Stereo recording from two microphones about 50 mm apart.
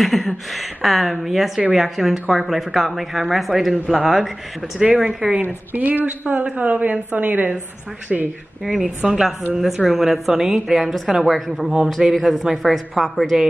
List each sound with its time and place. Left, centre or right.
0.0 s a woman's voice: centre
5.4 s a woman's voice: right
8.1 s a woman's voice: centre